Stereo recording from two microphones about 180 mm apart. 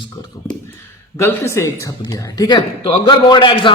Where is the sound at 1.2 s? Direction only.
15° left (ahead or behind).